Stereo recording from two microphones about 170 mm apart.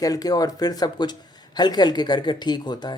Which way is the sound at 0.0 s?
20° left (ahead or behind).